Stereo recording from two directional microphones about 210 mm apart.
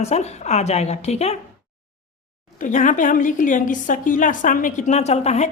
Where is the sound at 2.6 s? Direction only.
35° left (ahead or behind).